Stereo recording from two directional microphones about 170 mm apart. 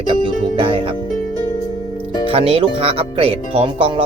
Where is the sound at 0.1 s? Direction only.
30° right (ahead or behind).